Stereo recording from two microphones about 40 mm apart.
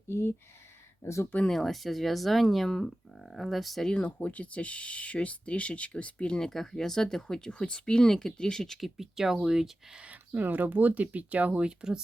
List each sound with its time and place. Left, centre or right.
1.5 s speech: centre
3.9 s speech: left
6.5 s speech: centre
8.8 s speech: centre
10.1 s speech: right